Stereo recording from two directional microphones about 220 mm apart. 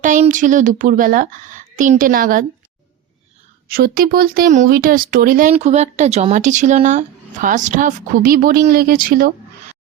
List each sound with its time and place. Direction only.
0.0 s speech: 35° right (ahead or behind)
3.7 s speech: 40° right (ahead or behind)